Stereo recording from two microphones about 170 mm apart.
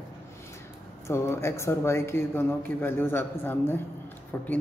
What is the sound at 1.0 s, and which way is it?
A man's voice, 15° left (ahead or behind).